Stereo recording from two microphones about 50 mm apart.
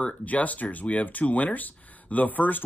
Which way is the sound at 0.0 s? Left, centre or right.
Left.